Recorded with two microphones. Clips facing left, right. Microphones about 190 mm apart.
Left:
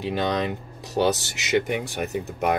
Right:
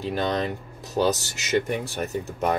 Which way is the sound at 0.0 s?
15° left (ahead or behind).